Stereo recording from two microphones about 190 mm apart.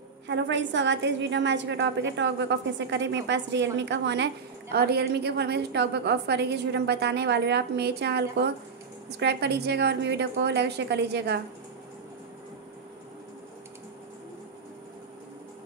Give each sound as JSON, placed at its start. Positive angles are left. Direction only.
{"t": 0.3, "sound": "a woman's voice", "side_deg": -70}
{"t": 4.7, "sound": "a woman's voice", "side_deg": -55}